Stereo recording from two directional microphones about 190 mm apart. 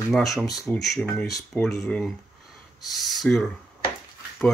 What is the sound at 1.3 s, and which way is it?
Speech, 20° left (ahead or behind).